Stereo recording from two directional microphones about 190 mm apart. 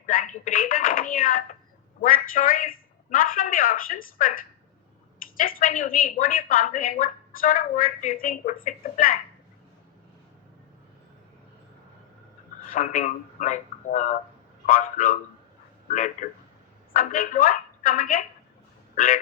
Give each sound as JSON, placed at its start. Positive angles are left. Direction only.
{"t": 0.0, "sound": "a sound", "side_deg": 45}
{"t": 2.0, "sound": "speech", "side_deg": 45}
{"t": 5.4, "sound": "speech", "side_deg": 45}
{"t": 12.6, "sound": "speech", "side_deg": 45}